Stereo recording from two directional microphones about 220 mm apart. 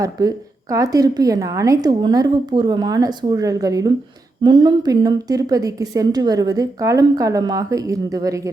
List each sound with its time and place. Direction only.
0.0 s a woman's voice: 15° right (ahead or behind)